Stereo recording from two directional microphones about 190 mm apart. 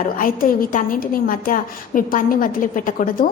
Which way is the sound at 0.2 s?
45° left (ahead or behind).